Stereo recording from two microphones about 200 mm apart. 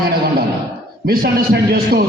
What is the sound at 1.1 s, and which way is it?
Speech, 50° right (ahead or behind).